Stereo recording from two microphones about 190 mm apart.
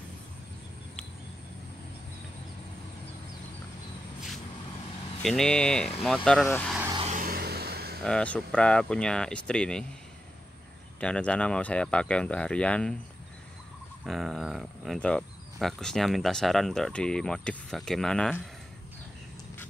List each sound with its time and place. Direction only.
5.2 s speech: centre (ahead or behind)
7.1 s a sound: 50° right (ahead or behind)
8.0 s speech: 5° left (ahead or behind)
11.0 s speech: 5° left (ahead or behind)
14.0 s speech: centre (ahead or behind)